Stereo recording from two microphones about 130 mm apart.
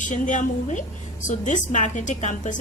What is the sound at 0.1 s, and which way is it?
A woman's voice, 75° left (ahead or behind).